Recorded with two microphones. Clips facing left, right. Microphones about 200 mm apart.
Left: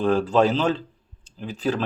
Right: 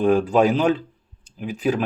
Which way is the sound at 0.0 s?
15° right (ahead or behind).